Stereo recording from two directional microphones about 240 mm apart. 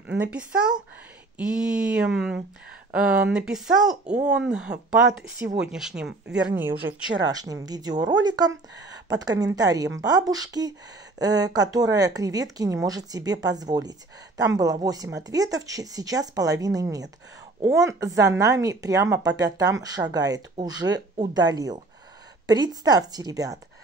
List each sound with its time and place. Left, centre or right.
0.2 s speech: centre